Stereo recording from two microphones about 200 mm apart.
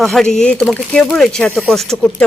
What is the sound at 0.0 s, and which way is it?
Speech, centre (ahead or behind).